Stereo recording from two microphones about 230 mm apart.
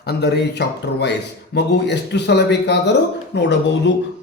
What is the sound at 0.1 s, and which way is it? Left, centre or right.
Speech, left.